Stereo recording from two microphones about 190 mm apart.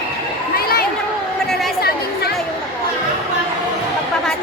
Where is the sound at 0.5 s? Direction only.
55° left (ahead or behind).